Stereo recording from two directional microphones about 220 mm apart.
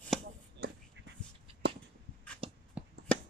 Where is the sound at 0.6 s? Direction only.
50° right (ahead or behind).